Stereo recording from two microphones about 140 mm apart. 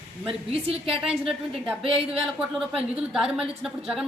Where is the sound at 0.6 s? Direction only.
45° right (ahead or behind).